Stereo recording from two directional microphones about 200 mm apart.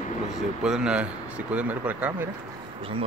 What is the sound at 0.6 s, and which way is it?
Speech, 5° right (ahead or behind).